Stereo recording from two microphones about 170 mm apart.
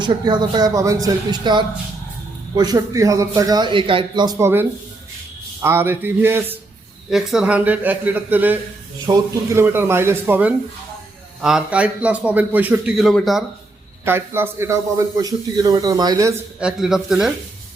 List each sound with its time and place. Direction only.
0.0 s a man's voice: 25° right (ahead or behind)
5.6 s a man's voice: 15° right (ahead or behind)
14.0 s a man's voice: 15° right (ahead or behind)
16.6 s speech: 5° right (ahead or behind)